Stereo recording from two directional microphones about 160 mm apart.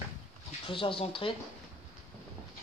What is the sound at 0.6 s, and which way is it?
Speech, 35° left (ahead or behind).